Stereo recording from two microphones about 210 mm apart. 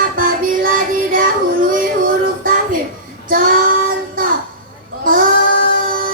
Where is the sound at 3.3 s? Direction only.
45° right (ahead or behind).